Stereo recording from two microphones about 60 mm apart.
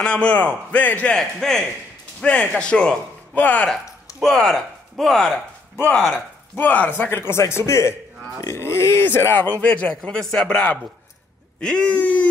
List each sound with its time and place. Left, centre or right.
0.0 s a man's voice: centre
1.1 s a man's voice: centre
2.6 s a man's voice: centre
3.3 s a man's voice: left
4.2 s speech: centre
5.9 s a man's voice: centre
7.2 s speech: left
9.0 s a man's voice: left